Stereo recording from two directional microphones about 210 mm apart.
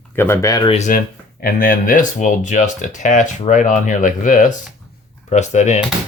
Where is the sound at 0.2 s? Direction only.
15° left (ahead or behind).